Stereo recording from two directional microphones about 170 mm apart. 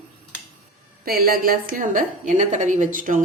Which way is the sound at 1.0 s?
60° right (ahead or behind).